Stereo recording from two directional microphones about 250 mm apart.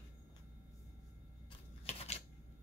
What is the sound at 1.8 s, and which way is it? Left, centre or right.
Typewriter, left.